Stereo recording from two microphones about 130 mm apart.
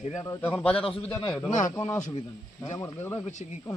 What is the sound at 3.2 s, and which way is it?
Speech, 65° left (ahead or behind).